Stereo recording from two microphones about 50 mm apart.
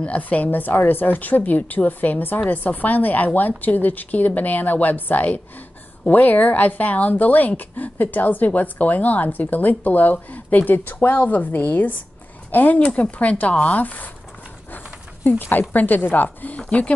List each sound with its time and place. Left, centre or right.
0.0 s speech: left
12.7 s speech: left
15.2 s speech: left